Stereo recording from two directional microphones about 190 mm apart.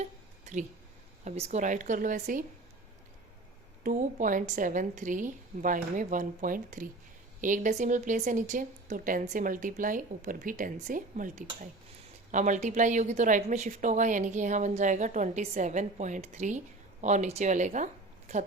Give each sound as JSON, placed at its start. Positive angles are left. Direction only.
{"t": 0.0, "sound": "a sound", "side_deg": -40}
{"t": 1.2, "sound": "a woman's voice", "side_deg": -40}
{"t": 3.8, "sound": "a woman's voice", "side_deg": -45}